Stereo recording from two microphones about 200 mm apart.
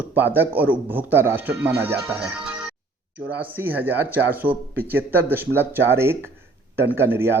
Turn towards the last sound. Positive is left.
turn(degrees=-10)  # may be behind; listen again after turning